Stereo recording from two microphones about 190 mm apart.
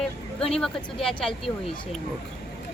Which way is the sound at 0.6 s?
5° left (ahead or behind).